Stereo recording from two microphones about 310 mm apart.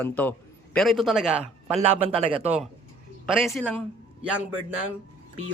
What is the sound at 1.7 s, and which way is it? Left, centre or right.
Speech, centre.